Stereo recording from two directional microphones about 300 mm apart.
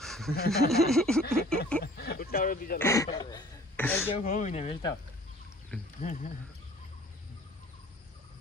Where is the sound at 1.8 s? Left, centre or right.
Left.